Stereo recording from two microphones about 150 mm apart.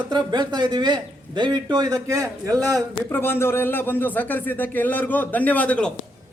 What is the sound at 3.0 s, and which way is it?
Speech, 15° left (ahead or behind).